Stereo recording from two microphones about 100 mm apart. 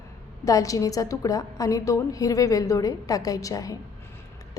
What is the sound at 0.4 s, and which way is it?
A woman's voice, 35° left (ahead or behind).